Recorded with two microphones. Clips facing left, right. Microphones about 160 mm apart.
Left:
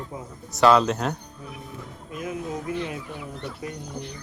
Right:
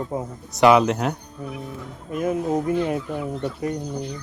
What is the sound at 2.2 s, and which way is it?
Speech, 45° right (ahead or behind).